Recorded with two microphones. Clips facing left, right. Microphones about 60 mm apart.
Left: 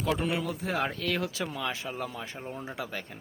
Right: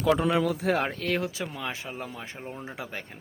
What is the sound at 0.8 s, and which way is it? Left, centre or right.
Speech, right.